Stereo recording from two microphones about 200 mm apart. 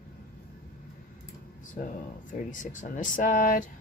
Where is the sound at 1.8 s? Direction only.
45° left (ahead or behind).